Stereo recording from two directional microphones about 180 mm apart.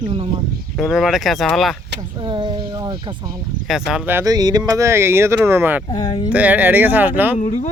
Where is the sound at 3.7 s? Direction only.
5° right (ahead or behind).